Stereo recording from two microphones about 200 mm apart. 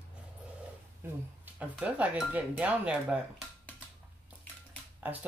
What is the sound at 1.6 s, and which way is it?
Speech, 5° right (ahead or behind).